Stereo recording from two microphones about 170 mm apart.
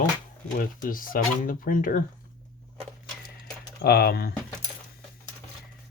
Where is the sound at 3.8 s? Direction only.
65° left (ahead or behind).